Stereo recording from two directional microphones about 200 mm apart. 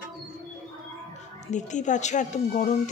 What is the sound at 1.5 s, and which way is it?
A woman's voice, 35° left (ahead or behind).